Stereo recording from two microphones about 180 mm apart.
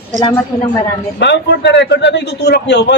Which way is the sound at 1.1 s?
75° left (ahead or behind).